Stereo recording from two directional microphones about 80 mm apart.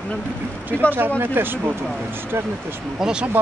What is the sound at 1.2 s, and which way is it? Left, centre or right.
Speech, right.